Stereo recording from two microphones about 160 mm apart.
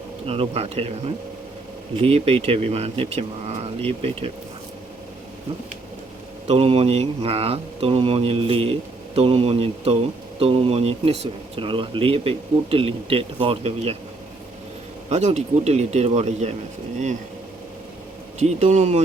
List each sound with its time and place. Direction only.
0.3 s speech: 35° right (ahead or behind)
6.5 s speech: 35° right (ahead or behind)
15.1 s speech: 45° right (ahead or behind)
18.3 s speech: 45° right (ahead or behind)